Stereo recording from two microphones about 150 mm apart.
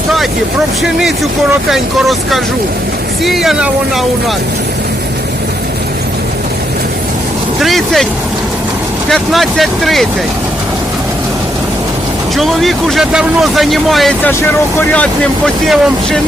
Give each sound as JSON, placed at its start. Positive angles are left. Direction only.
{"t": 0.8, "sound": "speech", "side_deg": 0}
{"t": 7.6, "sound": "speech", "side_deg": 0}
{"t": 9.0, "sound": "speech", "side_deg": 0}
{"t": 12.4, "sound": "speech", "side_deg": 0}
{"t": 14.3, "sound": "speech", "side_deg": 10}